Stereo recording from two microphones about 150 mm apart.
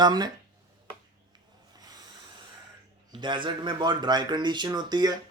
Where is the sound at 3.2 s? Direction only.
30° right (ahead or behind).